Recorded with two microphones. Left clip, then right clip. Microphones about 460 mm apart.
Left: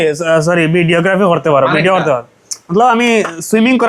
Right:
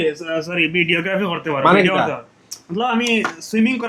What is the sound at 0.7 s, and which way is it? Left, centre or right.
Speech, left.